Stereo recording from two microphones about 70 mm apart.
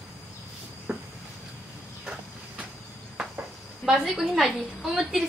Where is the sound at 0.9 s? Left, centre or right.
Right.